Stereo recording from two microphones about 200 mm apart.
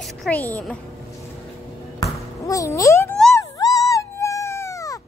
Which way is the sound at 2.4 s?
15° left (ahead or behind).